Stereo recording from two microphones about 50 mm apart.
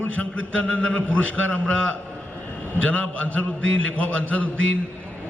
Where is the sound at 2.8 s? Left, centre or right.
Left.